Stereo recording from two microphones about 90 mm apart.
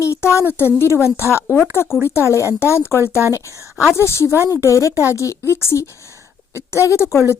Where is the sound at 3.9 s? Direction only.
30° left (ahead or behind).